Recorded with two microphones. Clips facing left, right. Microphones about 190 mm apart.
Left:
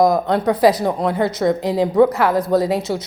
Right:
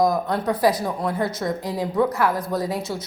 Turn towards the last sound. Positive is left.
turn(degrees=75)  # may be behind; listen again after turning